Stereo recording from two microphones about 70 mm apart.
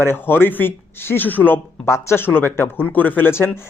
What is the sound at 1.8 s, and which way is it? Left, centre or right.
Speech, left.